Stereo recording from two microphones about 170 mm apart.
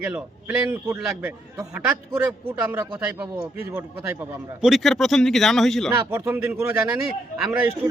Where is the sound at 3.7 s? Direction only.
10° right (ahead or behind).